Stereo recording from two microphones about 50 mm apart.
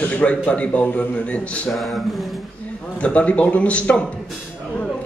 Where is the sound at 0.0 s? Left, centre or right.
Left.